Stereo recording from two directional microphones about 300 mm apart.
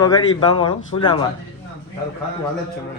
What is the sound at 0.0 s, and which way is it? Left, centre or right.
A man's voice, centre.